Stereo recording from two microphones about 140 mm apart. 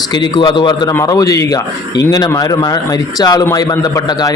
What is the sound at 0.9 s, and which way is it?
A man's voice, 25° left (ahead or behind).